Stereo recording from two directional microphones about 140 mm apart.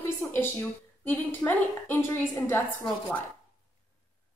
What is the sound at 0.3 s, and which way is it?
A woman's voice, 15° left (ahead or behind).